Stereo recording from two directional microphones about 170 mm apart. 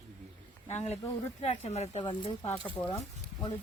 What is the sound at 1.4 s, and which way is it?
Speech, 40° left (ahead or behind).